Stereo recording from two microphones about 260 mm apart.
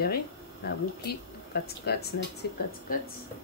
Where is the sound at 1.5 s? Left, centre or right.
Left.